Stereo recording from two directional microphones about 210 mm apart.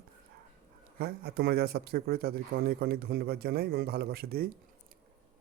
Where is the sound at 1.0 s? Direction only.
50° right (ahead or behind).